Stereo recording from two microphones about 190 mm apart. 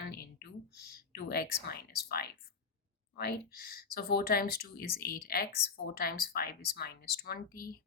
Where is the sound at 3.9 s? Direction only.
55° left (ahead or behind).